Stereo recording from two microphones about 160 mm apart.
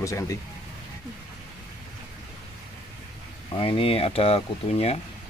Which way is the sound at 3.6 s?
35° left (ahead or behind).